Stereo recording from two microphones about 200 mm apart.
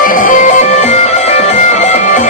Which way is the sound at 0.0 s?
45° left (ahead or behind).